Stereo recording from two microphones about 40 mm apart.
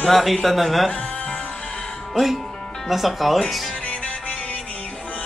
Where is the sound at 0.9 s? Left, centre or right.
Left.